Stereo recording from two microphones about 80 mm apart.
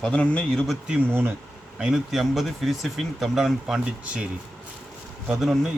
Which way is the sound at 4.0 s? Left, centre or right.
Centre.